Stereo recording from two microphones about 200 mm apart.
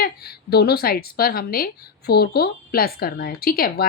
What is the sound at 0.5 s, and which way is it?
A woman's voice, 50° left (ahead or behind).